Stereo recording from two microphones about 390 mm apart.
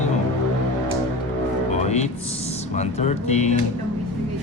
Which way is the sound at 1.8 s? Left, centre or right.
Centre.